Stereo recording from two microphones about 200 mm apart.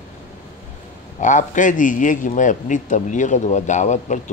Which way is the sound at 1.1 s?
40° left (ahead or behind).